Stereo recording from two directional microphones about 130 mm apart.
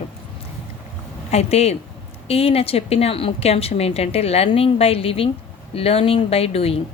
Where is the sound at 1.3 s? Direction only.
55° left (ahead or behind).